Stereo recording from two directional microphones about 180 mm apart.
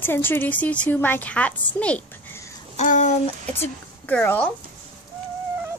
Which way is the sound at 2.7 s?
45° left (ahead or behind).